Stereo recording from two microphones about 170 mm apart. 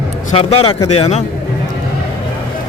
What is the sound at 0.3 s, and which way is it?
Speech, 35° left (ahead or behind).